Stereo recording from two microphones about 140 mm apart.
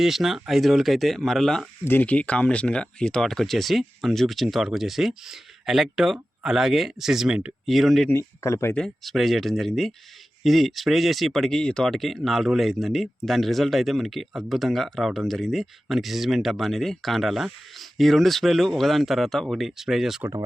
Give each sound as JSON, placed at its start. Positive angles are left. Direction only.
{"t": 0.0, "sound": "speech", "side_deg": 0}
{"t": 1.8, "sound": "speech", "side_deg": 15}
{"t": 8.4, "sound": "speech", "side_deg": 20}
{"t": 8.7, "sound": "speech", "side_deg": 5}